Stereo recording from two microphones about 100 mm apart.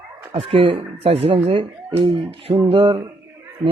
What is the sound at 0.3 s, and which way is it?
Speech, 65° right (ahead or behind).